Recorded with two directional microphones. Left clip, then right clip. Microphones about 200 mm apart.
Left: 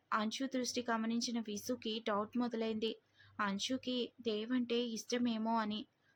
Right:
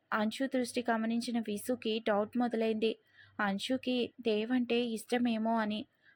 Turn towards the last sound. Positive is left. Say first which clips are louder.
# right 4 dB
turn(degrees=-15)  # may be behind; listen again after turning